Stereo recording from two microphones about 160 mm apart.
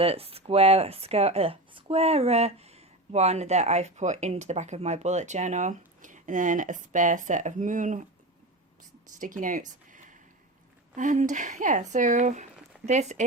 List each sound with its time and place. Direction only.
0.0 s speech: 35° right (ahead or behind); by 8.0 s 55° right (ahead or behind)
9.1 s speech: 55° right (ahead or behind)